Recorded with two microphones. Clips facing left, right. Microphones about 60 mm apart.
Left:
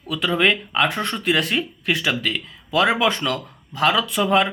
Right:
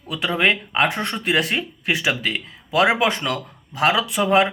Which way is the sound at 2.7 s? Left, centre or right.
Centre.